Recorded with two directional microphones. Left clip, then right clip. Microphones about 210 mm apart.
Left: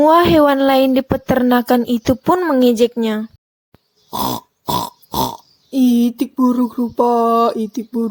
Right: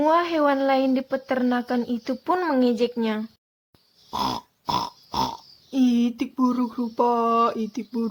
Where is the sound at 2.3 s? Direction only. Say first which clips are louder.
Left 6 dB; 25° left (ahead or behind).